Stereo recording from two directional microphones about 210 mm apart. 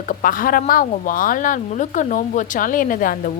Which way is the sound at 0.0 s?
40° left (ahead or behind).